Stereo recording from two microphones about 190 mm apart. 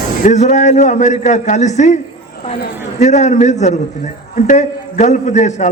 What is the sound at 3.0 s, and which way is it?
A man's voice, 40° left (ahead or behind).